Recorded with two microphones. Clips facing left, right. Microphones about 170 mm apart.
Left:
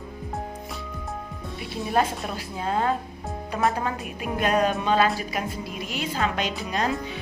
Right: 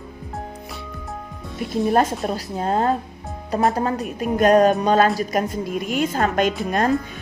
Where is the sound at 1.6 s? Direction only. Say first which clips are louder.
Right 6 dB; 45° right (ahead or behind).